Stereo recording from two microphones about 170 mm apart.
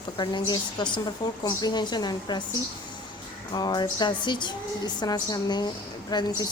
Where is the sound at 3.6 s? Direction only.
25° left (ahead or behind).